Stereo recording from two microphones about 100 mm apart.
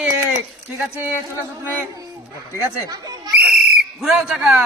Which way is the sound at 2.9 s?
40° right (ahead or behind).